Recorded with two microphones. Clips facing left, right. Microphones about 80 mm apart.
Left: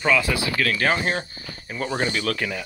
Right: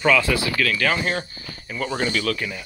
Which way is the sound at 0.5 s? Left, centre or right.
Left.